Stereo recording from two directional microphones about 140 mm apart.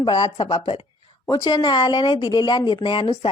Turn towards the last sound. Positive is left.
turn(degrees=35)  # may be behind; listen again after turning